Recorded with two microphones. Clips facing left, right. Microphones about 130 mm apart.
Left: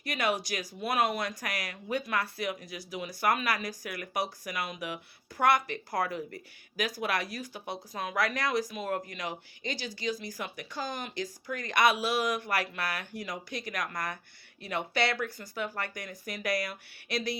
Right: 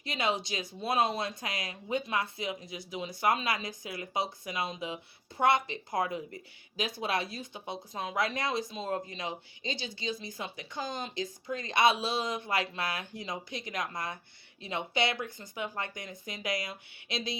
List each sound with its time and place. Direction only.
0.0 s speech: 25° right (ahead or behind)